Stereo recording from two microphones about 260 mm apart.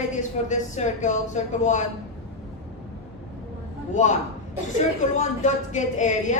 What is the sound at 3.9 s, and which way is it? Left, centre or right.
Speech, left.